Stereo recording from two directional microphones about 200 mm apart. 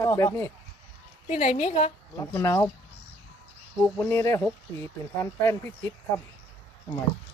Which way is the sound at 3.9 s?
10° left (ahead or behind).